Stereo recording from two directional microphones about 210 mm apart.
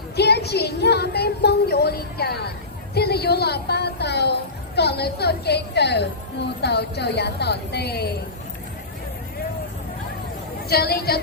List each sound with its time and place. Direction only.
0.2 s a woman's voice: 50° left (ahead or behind)
10.7 s a woman's voice: 50° left (ahead or behind)